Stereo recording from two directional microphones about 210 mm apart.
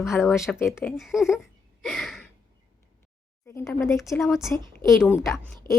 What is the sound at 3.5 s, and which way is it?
Speech, 10° left (ahead or behind).